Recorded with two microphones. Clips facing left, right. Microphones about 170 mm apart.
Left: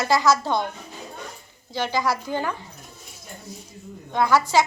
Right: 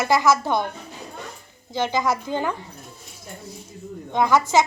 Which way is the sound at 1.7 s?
20° right (ahead or behind).